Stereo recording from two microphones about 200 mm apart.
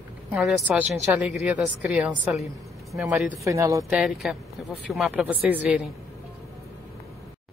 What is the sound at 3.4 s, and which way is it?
Speech, 15° right (ahead or behind).